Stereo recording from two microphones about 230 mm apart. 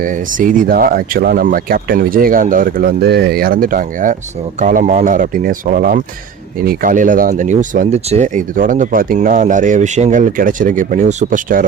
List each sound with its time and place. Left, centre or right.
0.0 s speech: right